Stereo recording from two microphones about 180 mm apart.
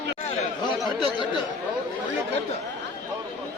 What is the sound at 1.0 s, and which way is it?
Speech, 25° left (ahead or behind).